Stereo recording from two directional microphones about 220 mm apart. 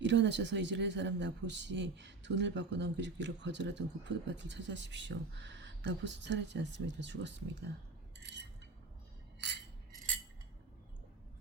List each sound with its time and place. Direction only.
0.0 s speech: 55° right (ahead or behind)
8.2 s cutlery: 50° right (ahead or behind)